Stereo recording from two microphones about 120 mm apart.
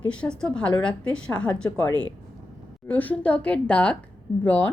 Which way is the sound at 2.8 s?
15° left (ahead or behind).